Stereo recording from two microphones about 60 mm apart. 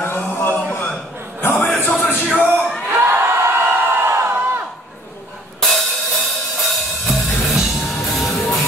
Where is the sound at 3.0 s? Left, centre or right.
Right.